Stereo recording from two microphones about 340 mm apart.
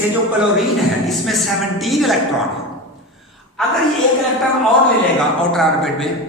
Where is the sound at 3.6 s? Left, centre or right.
Centre.